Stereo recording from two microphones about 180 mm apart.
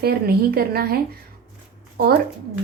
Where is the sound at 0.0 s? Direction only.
60° right (ahead or behind).